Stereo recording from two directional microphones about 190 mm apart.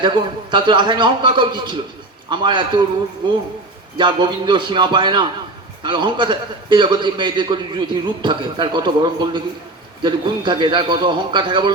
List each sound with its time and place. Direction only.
0.5 s a man's voice: 25° right (ahead or behind)
3.9 s a man's voice: 25° right (ahead or behind)